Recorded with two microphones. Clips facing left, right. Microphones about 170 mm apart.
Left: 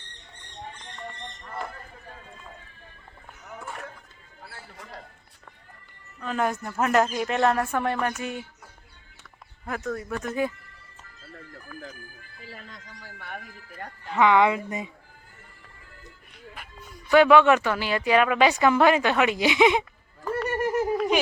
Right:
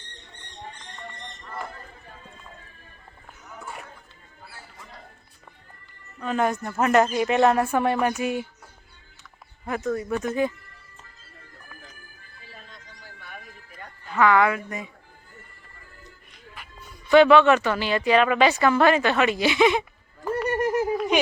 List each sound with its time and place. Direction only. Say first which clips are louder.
6.2 s speech: right 3 dB; centre (ahead or behind)
9.6 s speech: right 4 dB; centre (ahead or behind)
12.5 s music: left 3 dB; 90° left; by 13.9 s 65° left (ahead or behind)
14.1 s speech: even; 20° left (ahead or behind)
17.1 s speech: right 2 dB; 10° left (ahead or behind)
20.9 s a sound: even; centre (ahead or behind)